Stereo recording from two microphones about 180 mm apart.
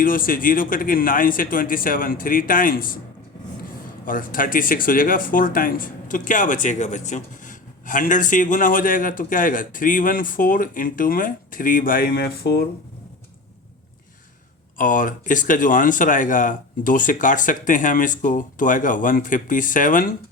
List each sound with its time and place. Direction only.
0.0 s speech: 50° left (ahead or behind)
4.0 s speech: 50° left (ahead or behind)
14.8 s speech: 45° left (ahead or behind)